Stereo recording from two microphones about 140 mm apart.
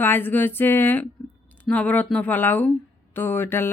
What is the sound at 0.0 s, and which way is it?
Speech, 15° left (ahead or behind).